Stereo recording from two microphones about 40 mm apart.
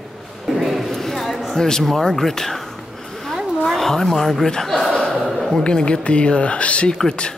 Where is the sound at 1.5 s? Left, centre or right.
Centre.